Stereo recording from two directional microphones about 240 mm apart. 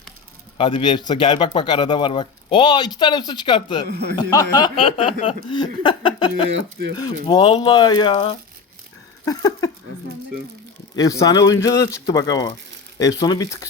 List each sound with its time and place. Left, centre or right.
0.6 s speech: centre
10.9 s speech: centre